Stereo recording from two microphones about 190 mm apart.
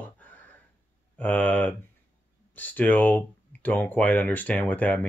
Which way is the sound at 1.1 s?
10° left (ahead or behind).